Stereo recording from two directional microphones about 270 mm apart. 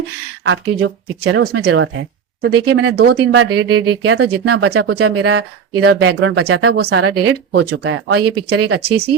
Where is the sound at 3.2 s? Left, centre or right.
Right.